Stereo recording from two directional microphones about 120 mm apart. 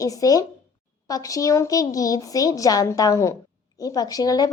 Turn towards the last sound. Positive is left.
turn(degrees=30)  # may be behind; listen again after turning